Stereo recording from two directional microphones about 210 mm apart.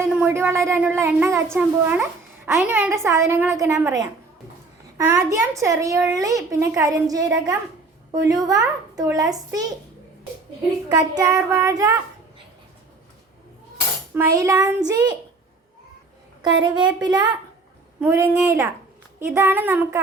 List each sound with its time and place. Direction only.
0.0 s a child's voice: 10° right (ahead or behind)
10.8 s a child's voice: 20° right (ahead or behind)
14.1 s a child's voice: 15° right (ahead or behind)
16.4 s a woman's voice: 20° right (ahead or behind)